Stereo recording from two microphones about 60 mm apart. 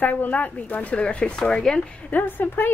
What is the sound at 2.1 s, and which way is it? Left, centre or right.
Speech, left.